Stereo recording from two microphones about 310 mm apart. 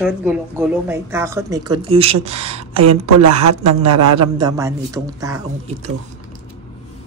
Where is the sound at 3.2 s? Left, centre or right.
Right.